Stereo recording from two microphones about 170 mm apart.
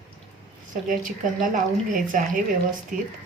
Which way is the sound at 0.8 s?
50° right (ahead or behind).